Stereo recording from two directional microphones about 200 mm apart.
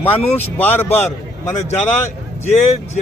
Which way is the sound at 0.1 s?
30° left (ahead or behind).